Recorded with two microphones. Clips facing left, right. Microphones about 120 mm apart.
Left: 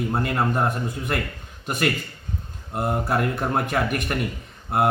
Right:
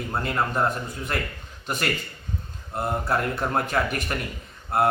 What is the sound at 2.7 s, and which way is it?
A man's voice, 15° left (ahead or behind).